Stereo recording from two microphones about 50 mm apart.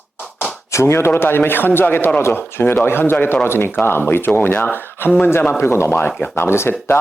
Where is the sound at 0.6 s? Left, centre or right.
Left.